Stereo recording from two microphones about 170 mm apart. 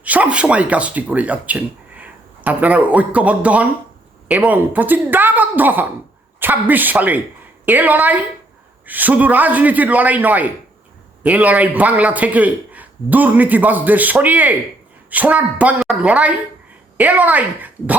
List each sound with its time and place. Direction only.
0.0 s a man's voice: 10° right (ahead or behind)